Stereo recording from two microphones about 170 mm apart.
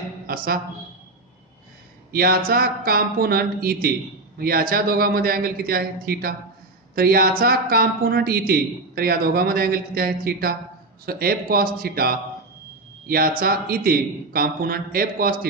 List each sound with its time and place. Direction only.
0.3 s a woman's voice: 60° right (ahead or behind)
2.1 s a man's voice: 60° right (ahead or behind)